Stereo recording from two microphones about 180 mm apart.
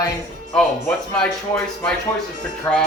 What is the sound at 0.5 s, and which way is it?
Speech, 5° left (ahead or behind).